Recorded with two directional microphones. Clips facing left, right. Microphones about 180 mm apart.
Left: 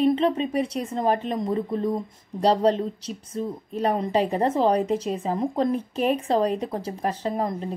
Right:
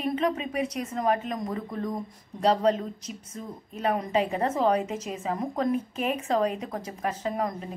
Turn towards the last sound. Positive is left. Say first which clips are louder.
# left 3 dB
turn(degrees=30)  # may be behind; listen again after turning